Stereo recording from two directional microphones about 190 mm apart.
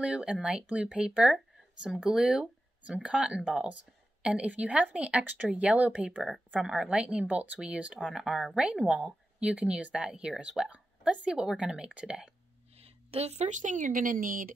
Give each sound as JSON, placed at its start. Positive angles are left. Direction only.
{"t": 0.0, "sound": "speech", "side_deg": -5}
{"t": 12.7, "sound": "a woman's voice", "side_deg": -30}